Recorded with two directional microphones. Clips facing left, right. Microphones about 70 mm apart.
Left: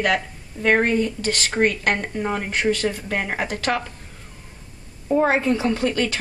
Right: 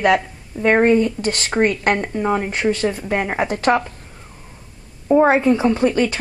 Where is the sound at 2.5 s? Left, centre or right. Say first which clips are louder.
Right 2 dB; right.